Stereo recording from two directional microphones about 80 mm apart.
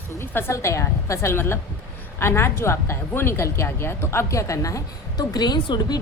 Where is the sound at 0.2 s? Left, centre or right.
Left.